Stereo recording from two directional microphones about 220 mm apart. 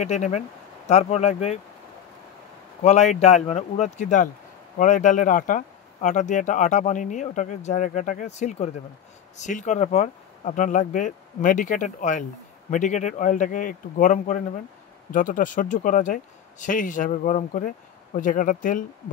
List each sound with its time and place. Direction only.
0.0 s speech: 30° left (ahead or behind)
2.8 s speech: 30° left (ahead or behind)